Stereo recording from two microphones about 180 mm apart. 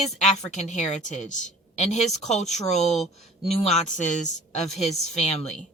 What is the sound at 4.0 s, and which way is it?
Speech, 40° left (ahead or behind).